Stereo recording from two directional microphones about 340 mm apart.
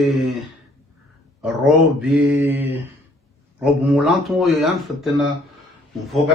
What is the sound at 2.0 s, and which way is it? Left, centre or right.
Speech, centre.